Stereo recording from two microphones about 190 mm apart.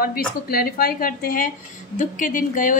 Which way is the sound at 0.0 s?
50° left (ahead or behind).